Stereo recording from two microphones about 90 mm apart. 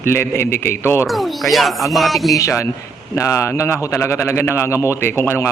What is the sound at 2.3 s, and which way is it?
A man's voice, 35° left (ahead or behind).